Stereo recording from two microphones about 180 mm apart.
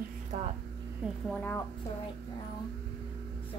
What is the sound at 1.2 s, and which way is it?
Speech, 10° left (ahead or behind).